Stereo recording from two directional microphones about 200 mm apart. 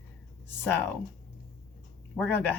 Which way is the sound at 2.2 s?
10° left (ahead or behind).